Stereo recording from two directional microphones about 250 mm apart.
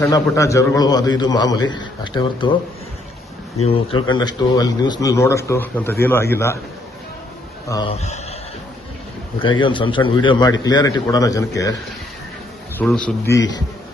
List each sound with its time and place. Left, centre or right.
0.0 s a man's voice: centre
3.6 s a man's voice: left
7.7 s a man's voice: centre
9.4 s a man's voice: centre
13.1 s a man's voice: centre